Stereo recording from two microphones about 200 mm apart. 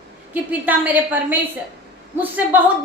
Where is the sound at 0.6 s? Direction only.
10° right (ahead or behind).